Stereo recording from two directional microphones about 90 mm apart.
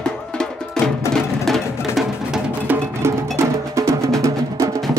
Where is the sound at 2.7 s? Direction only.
20° right (ahead or behind).